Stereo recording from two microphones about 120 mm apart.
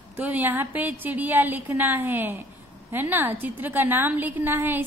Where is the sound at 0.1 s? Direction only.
15° right (ahead or behind).